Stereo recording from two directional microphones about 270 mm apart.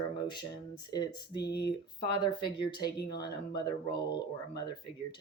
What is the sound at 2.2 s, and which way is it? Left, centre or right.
Speech, centre.